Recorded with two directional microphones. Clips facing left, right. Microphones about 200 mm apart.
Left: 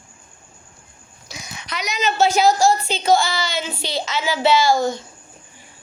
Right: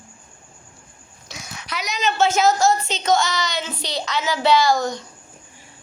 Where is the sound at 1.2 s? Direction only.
Centre (ahead or behind).